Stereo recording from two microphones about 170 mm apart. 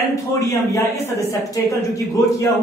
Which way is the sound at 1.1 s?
20° left (ahead or behind).